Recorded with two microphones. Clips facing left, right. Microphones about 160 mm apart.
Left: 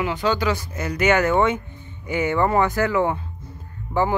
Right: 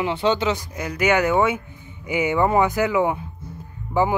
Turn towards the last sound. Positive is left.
turn(degrees=-10)  # may be behind; listen again after turning